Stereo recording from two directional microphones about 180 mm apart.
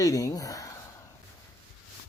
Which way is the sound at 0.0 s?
20° left (ahead or behind).